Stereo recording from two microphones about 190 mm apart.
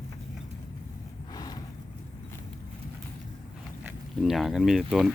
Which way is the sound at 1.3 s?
20° left (ahead or behind).